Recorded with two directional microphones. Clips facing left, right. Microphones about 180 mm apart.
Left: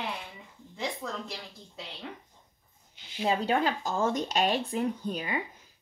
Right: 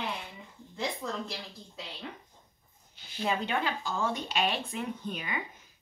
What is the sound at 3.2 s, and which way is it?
Speech, 35° left (ahead or behind).